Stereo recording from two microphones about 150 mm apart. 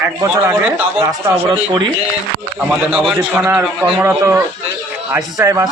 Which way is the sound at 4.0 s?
15° right (ahead or behind).